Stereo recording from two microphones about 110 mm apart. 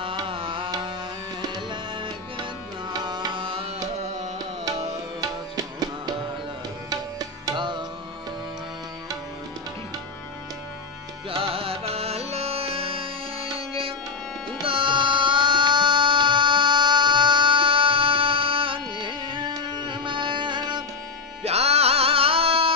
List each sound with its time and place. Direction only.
0.0 s tabla: 55° right (ahead or behind)
1.7 s music: 45° right (ahead or behind)
2.9 s tabla: 40° right (ahead or behind)
4.0 s carnatic music: 90° right
5.2 s music: 35° right (ahead or behind)
6.9 s tabla: 40° right (ahead or behind)
11.2 s music: 55° right (ahead or behind)
21.5 s music: 70° right (ahead or behind)